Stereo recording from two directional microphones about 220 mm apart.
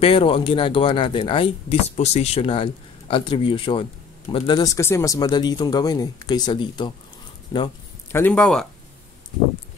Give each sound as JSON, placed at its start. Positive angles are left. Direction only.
{"t": 0.0, "sound": "speech", "side_deg": 25}